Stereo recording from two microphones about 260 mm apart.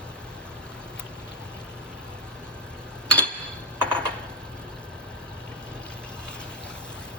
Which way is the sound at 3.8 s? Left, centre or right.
Centre.